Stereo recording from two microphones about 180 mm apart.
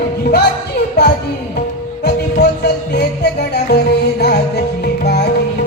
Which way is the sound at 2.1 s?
65° left (ahead or behind).